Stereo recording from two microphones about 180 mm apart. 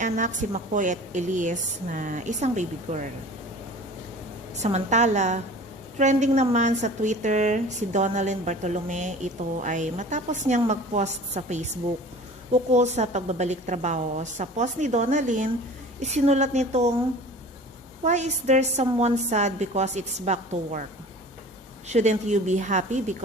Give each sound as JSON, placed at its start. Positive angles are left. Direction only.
{"t": 0.0, "sound": "a woman's voice", "side_deg": -45}
{"t": 4.5, "sound": "a woman's voice", "side_deg": -40}
{"t": 18.0, "sound": "a woman's voice", "side_deg": -40}
{"t": 21.8, "sound": "a woman's voice", "side_deg": -40}